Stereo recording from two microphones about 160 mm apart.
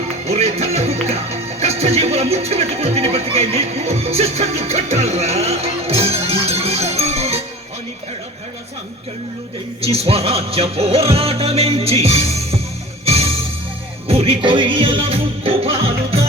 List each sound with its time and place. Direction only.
0.3 s music: 40° right (ahead or behind)
9.8 s music: 40° right (ahead or behind)